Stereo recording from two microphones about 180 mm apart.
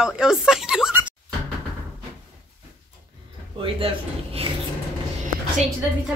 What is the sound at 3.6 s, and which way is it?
Speech, 30° right (ahead or behind).